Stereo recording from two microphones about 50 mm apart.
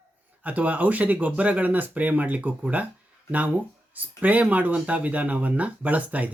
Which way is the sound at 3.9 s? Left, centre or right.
Right.